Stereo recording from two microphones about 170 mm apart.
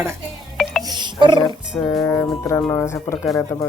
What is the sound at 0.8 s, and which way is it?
Music, 25° right (ahead or behind).